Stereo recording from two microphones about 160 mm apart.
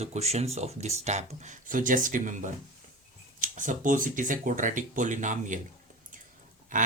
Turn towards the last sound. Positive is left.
turn(degrees=-55)  # may be behind; listen again after turning